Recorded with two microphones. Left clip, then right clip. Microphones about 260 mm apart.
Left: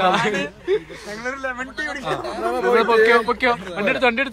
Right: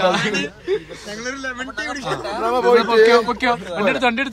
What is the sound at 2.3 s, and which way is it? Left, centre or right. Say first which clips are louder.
Speech: right 4 dB; right.